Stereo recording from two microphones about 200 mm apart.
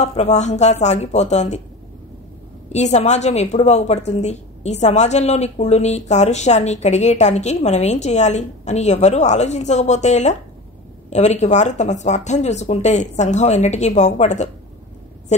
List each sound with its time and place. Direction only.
0.0 s a woman's voice: 35° left (ahead or behind)
2.7 s a woman's voice: 35° left (ahead or behind)